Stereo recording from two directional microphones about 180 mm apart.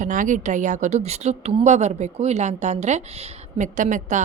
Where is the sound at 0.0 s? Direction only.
45° right (ahead or behind).